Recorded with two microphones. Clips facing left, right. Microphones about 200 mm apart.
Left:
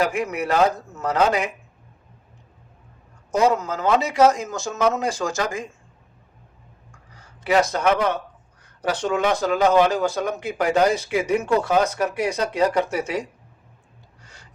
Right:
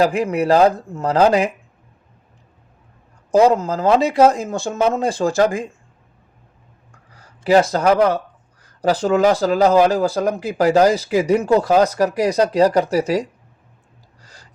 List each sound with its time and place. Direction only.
0.0 s speech: 30° right (ahead or behind)
3.3 s speech: 30° right (ahead or behind)
7.2 s speech: 35° right (ahead or behind)
14.2 s a sound: 35° right (ahead or behind)